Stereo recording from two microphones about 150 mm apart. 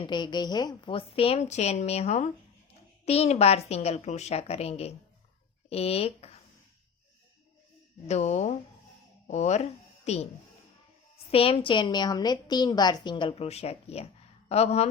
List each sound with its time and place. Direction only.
0.0 s a woman's voice: 30° left (ahead or behind)
8.0 s a woman's voice: 50° left (ahead or behind)
11.3 s a woman's voice: 40° left (ahead or behind)